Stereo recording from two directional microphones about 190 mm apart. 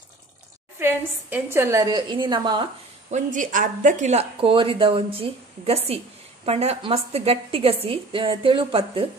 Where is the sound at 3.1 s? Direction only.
45° right (ahead or behind).